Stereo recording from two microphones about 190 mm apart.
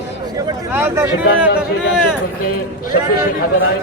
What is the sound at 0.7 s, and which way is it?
Speech, 10° right (ahead or behind).